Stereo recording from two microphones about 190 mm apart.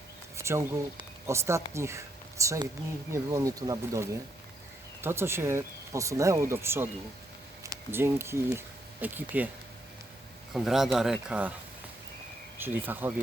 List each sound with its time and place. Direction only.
0.3 s speech: 15° right (ahead or behind)
10.5 s speech: centre (ahead or behind)
12.5 s speech: 10° right (ahead or behind)